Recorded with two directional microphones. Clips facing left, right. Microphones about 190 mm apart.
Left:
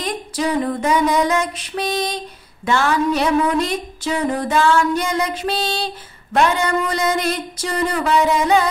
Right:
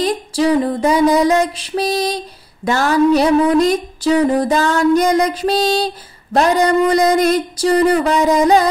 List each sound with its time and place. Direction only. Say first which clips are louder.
0.0 s female singing: right 6 dB; 35° right (ahead or behind)